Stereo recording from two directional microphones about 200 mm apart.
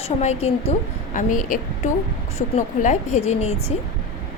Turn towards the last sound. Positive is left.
turn(degrees=35)  # may be behind; listen again after turning